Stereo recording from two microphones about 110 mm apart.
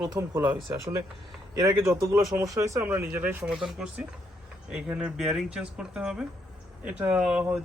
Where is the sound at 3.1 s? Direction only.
20° right (ahead or behind).